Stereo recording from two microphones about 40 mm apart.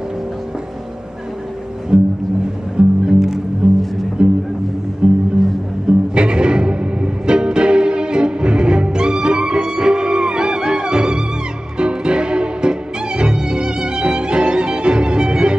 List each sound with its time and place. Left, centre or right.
1.9 s music: right
3.1 s music: centre